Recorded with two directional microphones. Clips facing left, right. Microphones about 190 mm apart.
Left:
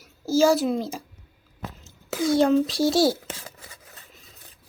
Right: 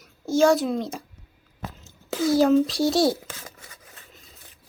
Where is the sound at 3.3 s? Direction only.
30° left (ahead or behind).